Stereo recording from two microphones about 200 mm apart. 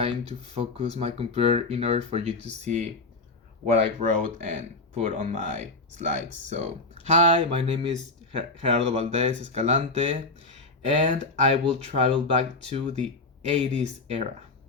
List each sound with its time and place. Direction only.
0.1 s speech: 30° right (ahead or behind)